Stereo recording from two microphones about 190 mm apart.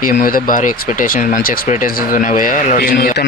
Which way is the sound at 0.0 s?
45° left (ahead or behind).